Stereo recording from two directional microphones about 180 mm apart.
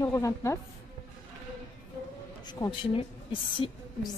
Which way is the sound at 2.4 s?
25° left (ahead or behind).